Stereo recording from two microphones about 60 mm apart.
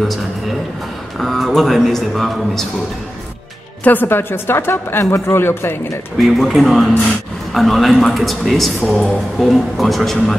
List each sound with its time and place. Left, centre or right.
1.2 s speech: centre
3.8 s a woman's voice: left
6.1 s speech: centre